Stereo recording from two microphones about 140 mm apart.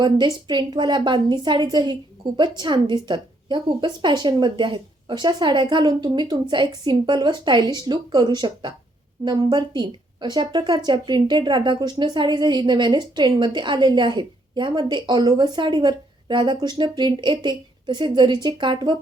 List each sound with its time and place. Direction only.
0.0 s speech: 30° right (ahead or behind)